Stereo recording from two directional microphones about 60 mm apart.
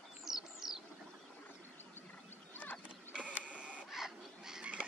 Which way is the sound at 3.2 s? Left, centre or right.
Right.